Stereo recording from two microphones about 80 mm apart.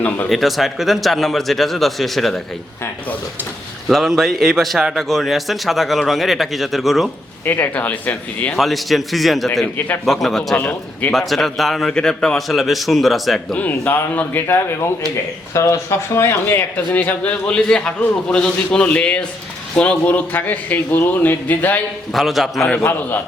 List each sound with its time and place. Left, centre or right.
0.3 s speech: centre
3.8 s speech: centre
7.4 s a man's voice: left
8.5 s speech: centre
10.6 s a man's voice: centre
11.1 s speech: centre
13.6 s a man's voice: left
22.1 s speech: centre
22.8 s a man's voice: left